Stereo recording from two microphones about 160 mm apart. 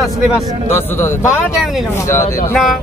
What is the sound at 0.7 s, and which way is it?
A man's voice, 15° left (ahead or behind).